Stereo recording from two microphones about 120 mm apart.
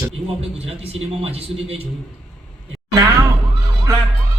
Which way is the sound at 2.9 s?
25° right (ahead or behind).